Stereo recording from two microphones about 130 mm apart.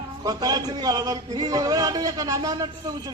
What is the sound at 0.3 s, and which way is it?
Speech, 30° right (ahead or behind).